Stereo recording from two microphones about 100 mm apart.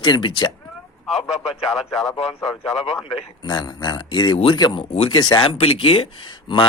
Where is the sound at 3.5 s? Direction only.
45° left (ahead or behind).